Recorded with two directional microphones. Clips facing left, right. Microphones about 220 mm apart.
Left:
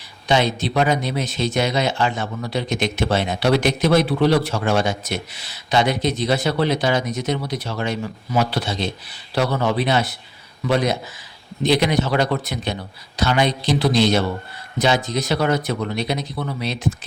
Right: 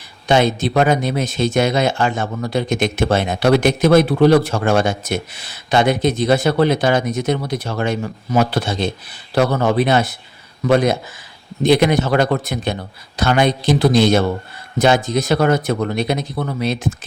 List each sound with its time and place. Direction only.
0.3 s speech: 50° right (ahead or behind)